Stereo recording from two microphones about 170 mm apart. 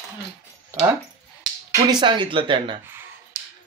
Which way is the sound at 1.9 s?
25° right (ahead or behind).